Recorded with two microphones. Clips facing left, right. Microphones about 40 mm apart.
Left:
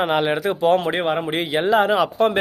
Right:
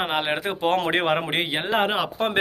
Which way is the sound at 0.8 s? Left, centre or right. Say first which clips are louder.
Left 1 dB; right.